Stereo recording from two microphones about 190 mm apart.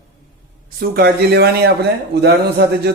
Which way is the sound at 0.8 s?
55° right (ahead or behind).